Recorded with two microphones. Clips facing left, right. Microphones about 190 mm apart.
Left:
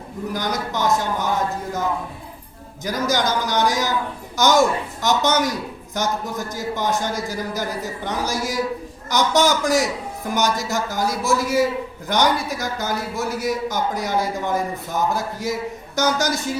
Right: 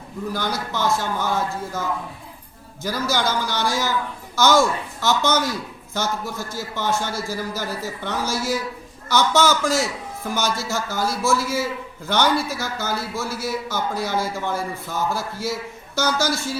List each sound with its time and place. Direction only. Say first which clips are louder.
0.3 s a man's voice: left 2 dB; 15° left (ahead or behind)
2.8 s a man's voice: left 2 dB; 15° left (ahead or behind)